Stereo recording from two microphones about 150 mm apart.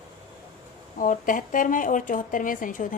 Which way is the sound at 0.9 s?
60° left (ahead or behind).